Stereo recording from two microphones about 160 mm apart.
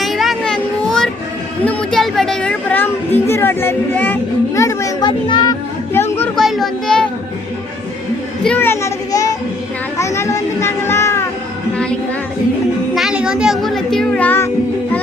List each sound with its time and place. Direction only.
0.0 s a sound: centre (ahead or behind)
1.6 s speech: centre (ahead or behind); by 5.5 s 25° left (ahead or behind)
5.9 s children playing: 15° left (ahead or behind)
6.3 s a child's voice: centre (ahead or behind)
8.4 s a child's voice: 15° left (ahead or behind)
12.9 s a child's voice: 5° right (ahead or behind); by 14.5 s 15° left (ahead or behind)